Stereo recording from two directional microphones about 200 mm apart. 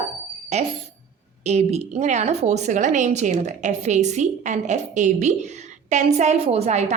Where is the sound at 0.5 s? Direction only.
35° right (ahead or behind).